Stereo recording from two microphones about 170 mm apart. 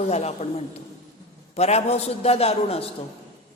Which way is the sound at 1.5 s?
40° left (ahead or behind).